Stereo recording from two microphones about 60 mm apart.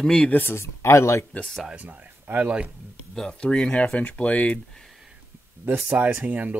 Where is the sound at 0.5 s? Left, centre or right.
Left.